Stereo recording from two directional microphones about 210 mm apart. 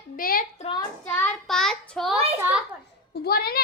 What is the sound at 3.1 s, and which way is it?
Speech, 50° left (ahead or behind).